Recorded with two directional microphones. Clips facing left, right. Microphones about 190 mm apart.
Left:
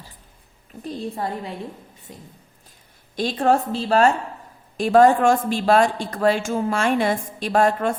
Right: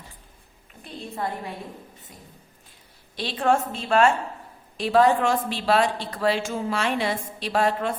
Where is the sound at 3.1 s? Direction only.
45° left (ahead or behind).